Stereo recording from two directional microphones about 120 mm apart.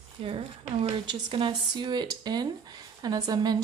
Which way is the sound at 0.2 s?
50° right (ahead or behind).